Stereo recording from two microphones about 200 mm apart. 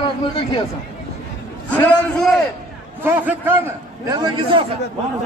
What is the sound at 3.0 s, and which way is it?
A man's voice, 10° right (ahead or behind).